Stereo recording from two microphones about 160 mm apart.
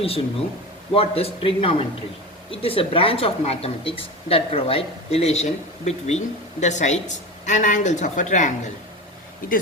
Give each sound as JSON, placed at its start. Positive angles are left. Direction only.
{"t": 0.0, "sound": "a woman's voice", "side_deg": 35}